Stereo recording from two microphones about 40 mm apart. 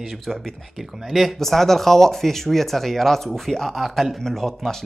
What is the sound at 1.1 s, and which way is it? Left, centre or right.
Speech, centre.